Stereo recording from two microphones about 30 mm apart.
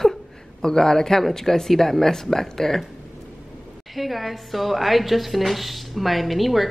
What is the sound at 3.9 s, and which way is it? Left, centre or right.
Speech, centre.